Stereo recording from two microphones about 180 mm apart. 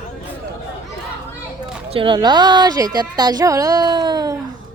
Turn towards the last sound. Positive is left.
turn(degrees=-25)  # may be behind; listen again after turning